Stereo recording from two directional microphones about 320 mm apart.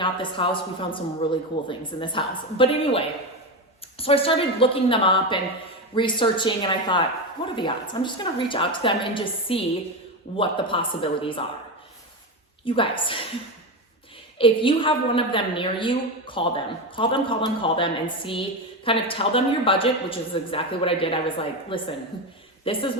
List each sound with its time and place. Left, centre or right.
0.0 s a man's voice: centre
12.6 s a man's voice: centre
14.3 s a man's voice: centre